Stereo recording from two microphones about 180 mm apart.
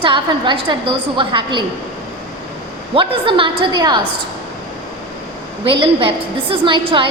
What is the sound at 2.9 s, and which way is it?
A woman's voice, 30° right (ahead or behind).